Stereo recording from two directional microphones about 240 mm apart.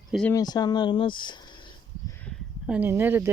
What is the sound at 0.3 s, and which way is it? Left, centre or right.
Speech, centre.